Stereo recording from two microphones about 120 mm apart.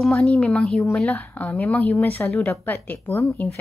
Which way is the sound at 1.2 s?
15° left (ahead or behind).